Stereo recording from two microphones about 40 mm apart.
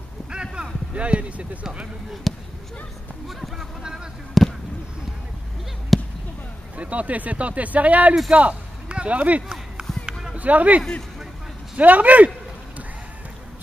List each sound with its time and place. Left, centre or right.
0.3 s a sound: right
1.6 s speech: right
2.3 s speech: centre
4.3 s basketball bounce: centre
5.9 s basketball bounce: centre
6.8 s a man's voice: right
9.5 s a sound: centre
10.4 s speech: right
11.8 s speech: right